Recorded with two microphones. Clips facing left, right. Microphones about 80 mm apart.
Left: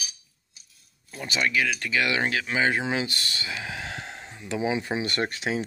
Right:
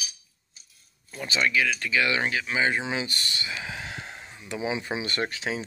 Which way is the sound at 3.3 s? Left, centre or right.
Left.